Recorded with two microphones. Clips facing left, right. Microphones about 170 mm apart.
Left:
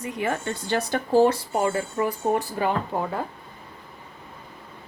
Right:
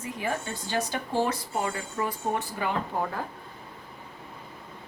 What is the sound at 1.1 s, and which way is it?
Speech, 30° left (ahead or behind).